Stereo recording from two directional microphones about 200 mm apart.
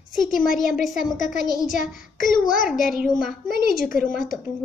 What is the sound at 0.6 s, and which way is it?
A woman's voice, centre (ahead or behind).